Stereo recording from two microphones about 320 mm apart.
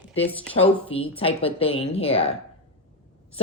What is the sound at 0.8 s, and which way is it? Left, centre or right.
Speech, centre.